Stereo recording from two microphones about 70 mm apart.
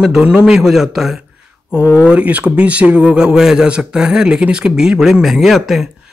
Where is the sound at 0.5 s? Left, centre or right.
Centre.